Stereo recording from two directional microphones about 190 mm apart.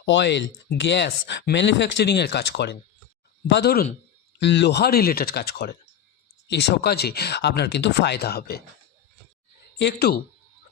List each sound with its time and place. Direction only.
0.0 s speech: 70° left (ahead or behind)
9.7 s speech: 60° left (ahead or behind)